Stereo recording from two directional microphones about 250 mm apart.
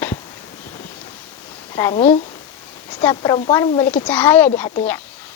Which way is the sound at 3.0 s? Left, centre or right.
Centre.